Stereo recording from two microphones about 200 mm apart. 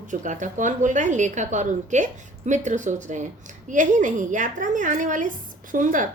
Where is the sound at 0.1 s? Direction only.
40° right (ahead or behind).